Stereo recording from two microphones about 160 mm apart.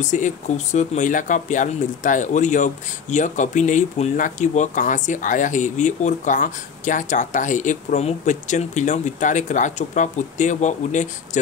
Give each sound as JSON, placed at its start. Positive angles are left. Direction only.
{"t": 0.0, "sound": "speech", "side_deg": 50}